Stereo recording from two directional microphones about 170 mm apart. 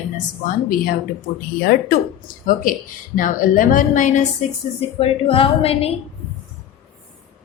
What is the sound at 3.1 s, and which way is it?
A woman's voice, 50° left (ahead or behind).